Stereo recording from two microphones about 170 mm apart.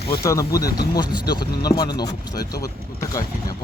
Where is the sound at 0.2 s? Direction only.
20° left (ahead or behind).